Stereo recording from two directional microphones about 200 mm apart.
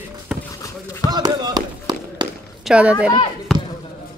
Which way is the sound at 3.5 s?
Centre (ahead or behind).